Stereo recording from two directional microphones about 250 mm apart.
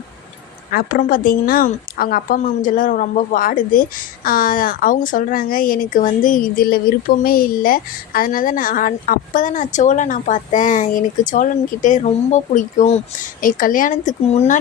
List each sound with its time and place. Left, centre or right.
0.7 s a woman's voice: left